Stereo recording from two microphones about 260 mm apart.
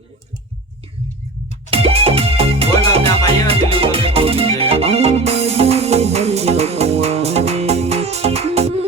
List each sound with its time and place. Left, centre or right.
1.7 s music: right